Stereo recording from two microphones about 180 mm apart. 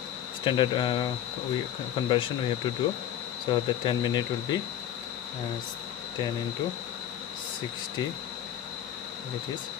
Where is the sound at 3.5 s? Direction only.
25° left (ahead or behind).